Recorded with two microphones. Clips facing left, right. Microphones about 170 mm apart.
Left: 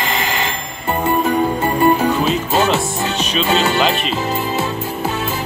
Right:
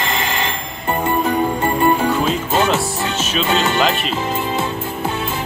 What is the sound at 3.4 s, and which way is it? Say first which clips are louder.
Music: left 1 dB; 10° left (ahead or behind).